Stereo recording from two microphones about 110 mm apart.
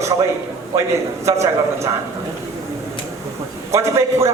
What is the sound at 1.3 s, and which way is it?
Speech, 25° right (ahead or behind).